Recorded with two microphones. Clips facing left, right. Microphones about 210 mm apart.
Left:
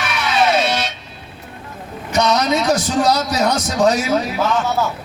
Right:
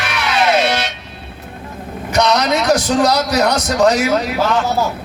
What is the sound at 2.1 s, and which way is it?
A man's voice, 70° right (ahead or behind).